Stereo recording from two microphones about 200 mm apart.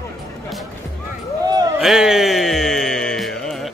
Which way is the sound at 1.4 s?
20° right (ahead or behind).